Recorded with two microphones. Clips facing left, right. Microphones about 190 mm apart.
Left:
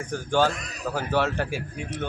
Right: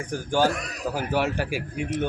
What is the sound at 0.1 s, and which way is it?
A man's voice, 10° right (ahead or behind).